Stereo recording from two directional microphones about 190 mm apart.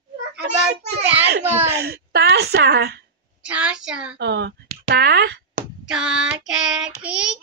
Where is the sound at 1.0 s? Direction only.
10° right (ahead or behind).